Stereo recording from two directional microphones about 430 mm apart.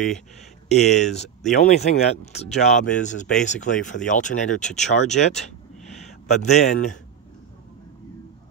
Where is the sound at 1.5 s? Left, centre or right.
Centre.